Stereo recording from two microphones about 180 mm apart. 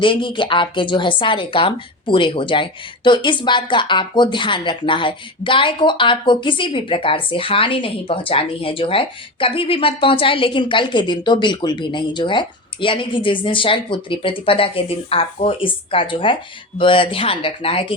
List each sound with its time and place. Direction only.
0.0 s a woman's voice: 25° left (ahead or behind)